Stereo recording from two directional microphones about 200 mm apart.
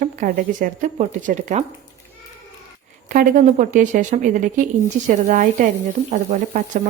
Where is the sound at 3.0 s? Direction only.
40° right (ahead or behind).